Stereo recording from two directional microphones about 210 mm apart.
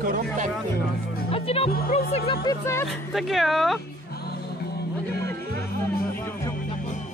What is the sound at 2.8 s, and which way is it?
Speech, centre (ahead or behind).